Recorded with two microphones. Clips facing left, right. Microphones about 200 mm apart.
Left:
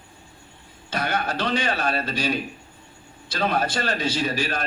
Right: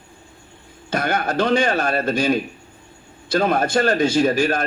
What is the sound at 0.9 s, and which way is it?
A man's voice, 50° right (ahead or behind).